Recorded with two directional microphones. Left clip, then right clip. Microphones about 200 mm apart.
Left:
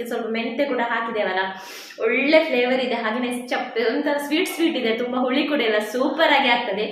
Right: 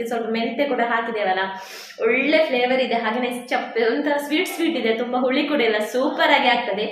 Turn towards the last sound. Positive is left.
turn(degrees=-5)  # may be behind; listen again after turning